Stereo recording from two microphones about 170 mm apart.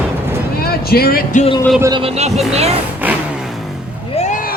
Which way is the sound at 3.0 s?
10° right (ahead or behind).